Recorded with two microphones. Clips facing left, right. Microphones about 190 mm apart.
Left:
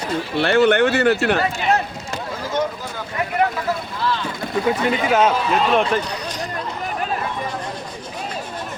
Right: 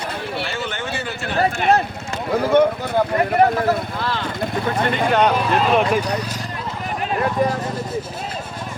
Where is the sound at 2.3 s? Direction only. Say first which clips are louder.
Right 9 dB; 60° right (ahead or behind).